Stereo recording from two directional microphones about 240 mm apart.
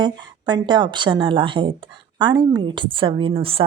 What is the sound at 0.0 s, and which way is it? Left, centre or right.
A woman's voice, centre.